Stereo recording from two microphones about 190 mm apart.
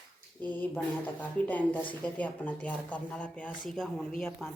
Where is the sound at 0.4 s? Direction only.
10° left (ahead or behind).